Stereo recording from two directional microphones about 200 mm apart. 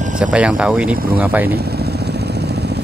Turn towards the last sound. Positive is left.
turn(degrees=-5)  # may be behind; listen again after turning